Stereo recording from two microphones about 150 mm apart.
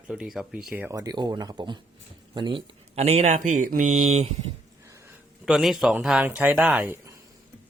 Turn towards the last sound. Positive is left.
turn(degrees=-20)  # may be behind; listen again after turning